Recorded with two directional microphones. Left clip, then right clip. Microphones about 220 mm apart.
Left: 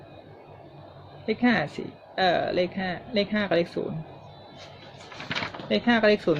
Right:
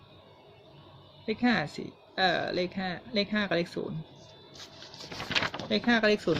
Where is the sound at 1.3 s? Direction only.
20° right (ahead or behind).